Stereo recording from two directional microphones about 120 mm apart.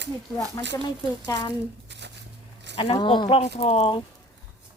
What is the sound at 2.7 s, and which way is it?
Speech, 45° left (ahead or behind).